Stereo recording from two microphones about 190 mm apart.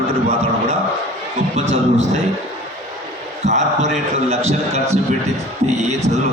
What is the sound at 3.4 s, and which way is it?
Mantra, 35° right (ahead or behind).